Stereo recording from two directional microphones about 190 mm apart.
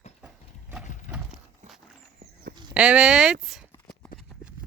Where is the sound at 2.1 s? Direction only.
55° right (ahead or behind).